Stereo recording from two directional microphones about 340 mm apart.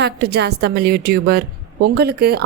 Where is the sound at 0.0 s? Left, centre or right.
Right.